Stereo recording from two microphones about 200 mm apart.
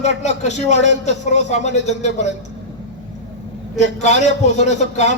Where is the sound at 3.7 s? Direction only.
35° left (ahead or behind).